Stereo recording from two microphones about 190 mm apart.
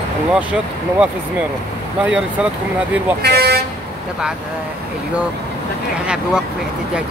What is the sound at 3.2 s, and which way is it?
Speech, 55° right (ahead or behind).